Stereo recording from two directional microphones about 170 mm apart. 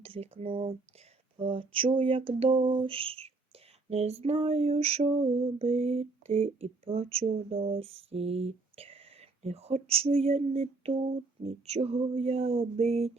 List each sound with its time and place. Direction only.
0.0 s speech: 35° right (ahead or behind)
1.4 s female singing: 30° right (ahead or behind)